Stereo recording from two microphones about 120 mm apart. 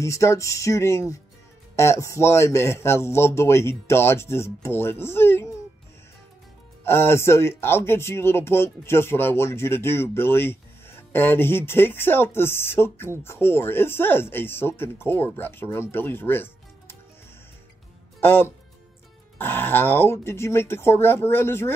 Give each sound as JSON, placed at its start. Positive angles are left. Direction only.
{"t": 0.0, "sound": "speech", "side_deg": 25}
{"t": 6.8, "sound": "speech", "side_deg": 20}
{"t": 18.2, "sound": "speech", "side_deg": 20}